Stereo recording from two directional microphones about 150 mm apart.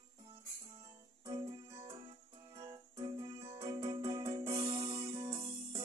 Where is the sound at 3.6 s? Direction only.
30° right (ahead or behind).